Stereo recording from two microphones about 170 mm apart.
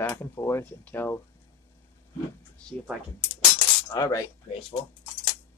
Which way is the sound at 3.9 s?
20° left (ahead or behind).